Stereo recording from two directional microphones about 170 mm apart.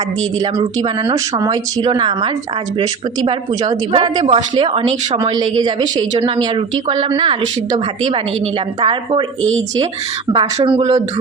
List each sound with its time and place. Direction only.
1.1 s a woman's voice: 20° right (ahead or behind)
3.6 s a woman's voice: 25° right (ahead or behind)
8.8 s a woman's voice: 30° right (ahead or behind)
10.3 s a woman's voice: 25° right (ahead or behind)